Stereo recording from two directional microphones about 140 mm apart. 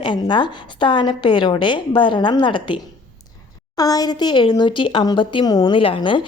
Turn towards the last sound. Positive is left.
turn(degrees=35)  # may be behind; listen again after turning